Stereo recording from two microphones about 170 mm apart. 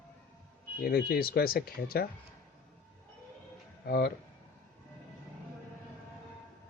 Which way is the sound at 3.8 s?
65° left (ahead or behind).